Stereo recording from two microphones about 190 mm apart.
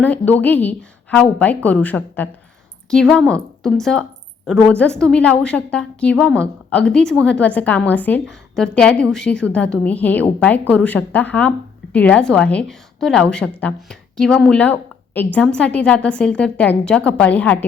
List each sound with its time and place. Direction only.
0.0 s a woman's voice: 10° left (ahead or behind)